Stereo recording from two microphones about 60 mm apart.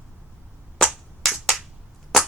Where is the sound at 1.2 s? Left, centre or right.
Centre.